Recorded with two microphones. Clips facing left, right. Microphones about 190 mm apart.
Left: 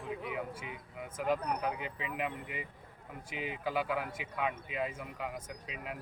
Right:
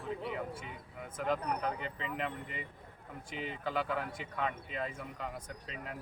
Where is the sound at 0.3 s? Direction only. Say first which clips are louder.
Even; 10° left (ahead or behind).